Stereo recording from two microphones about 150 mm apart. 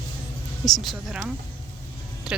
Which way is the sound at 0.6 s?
Centre (ahead or behind).